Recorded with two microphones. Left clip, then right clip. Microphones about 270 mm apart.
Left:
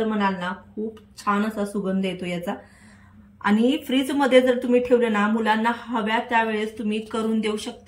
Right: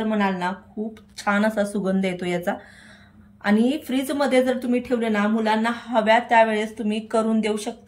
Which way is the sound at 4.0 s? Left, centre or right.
Centre.